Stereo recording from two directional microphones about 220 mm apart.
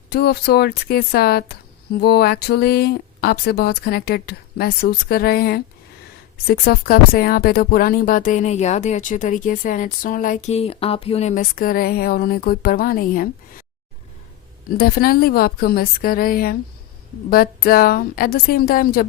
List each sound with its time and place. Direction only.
0.1 s speech: 45° left (ahead or behind)
14.8 s speech: 45° left (ahead or behind)